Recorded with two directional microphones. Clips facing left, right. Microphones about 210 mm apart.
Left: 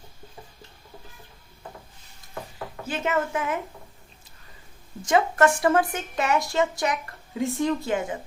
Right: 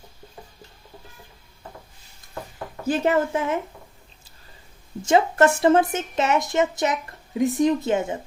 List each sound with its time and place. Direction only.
2.8 s a woman's voice: 35° right (ahead or behind)
5.0 s speech: 25° right (ahead or behind)